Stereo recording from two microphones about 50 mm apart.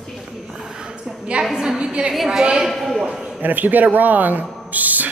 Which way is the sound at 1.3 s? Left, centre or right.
Right.